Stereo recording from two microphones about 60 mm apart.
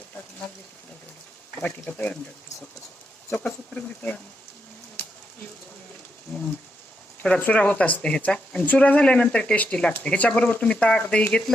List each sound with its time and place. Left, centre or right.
1.9 s speech: left
3.8 s speech: left
5.0 s a sound: left
7.2 s speech: left